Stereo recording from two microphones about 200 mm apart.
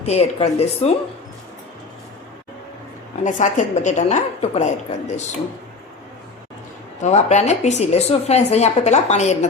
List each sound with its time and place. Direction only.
0.0 s speech: 30° left (ahead or behind)
3.2 s speech: 40° left (ahead or behind)
7.0 s speech: 35° left (ahead or behind)